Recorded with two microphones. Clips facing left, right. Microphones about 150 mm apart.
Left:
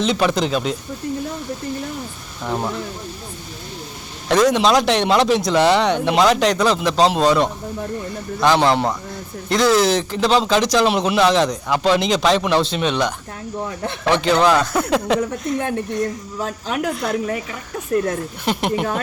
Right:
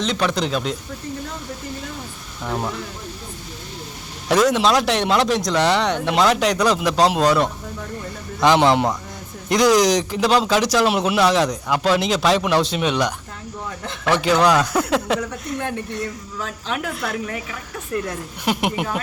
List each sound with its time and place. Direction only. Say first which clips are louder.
0.0 s speech: left 3 dB; 10° left (ahead or behind)
2.4 s speech: left 2 dB; 5° left (ahead or behind)
4.3 s speech: left 2 dB; 5° right (ahead or behind)
14.2 s speech: even; 10° right (ahead or behind)
15.5 s a woman's voice: left 4 dB; 50° left (ahead or behind)
18.4 s speech: left 1 dB; 10° right (ahead or behind)